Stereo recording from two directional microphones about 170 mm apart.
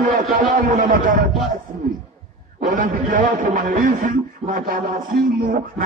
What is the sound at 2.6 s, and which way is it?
A man's voice, 55° right (ahead or behind).